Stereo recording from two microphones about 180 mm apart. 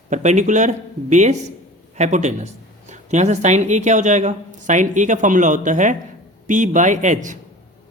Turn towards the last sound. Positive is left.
turn(degrees=-45)  # may be behind; listen again after turning